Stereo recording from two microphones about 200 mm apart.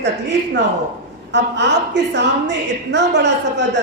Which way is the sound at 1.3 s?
60° right (ahead or behind).